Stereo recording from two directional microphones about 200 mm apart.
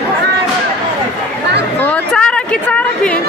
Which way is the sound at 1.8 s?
10° left (ahead or behind).